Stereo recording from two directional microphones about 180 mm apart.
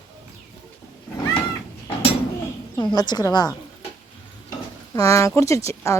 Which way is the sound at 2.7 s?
20° left (ahead or behind).